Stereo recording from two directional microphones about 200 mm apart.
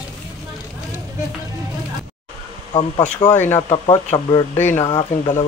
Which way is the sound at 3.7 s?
30° left (ahead or behind).